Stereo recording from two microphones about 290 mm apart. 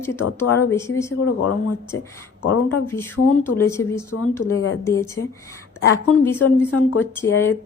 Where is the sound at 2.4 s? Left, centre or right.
Left.